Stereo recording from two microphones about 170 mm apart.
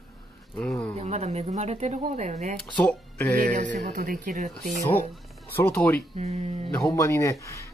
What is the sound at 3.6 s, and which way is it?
Speech, 45° right (ahead or behind).